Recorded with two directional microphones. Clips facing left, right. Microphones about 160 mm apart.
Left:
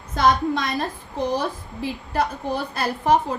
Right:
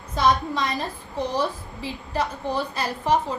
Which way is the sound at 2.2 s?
60° left (ahead or behind).